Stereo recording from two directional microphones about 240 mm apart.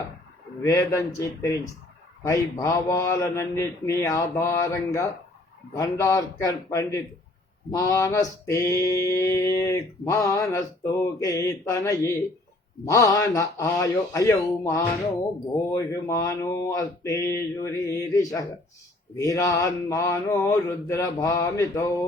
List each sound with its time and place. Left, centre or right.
0.6 s mantra: centre